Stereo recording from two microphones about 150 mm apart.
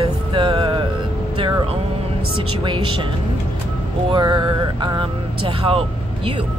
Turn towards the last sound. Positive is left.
turn(degrees=-35)  # may be behind; listen again after turning